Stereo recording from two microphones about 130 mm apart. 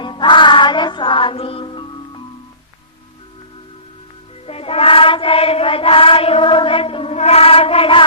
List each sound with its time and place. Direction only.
0.0 s music: 40° left (ahead or behind)
4.4 s chant: 50° left (ahead or behind)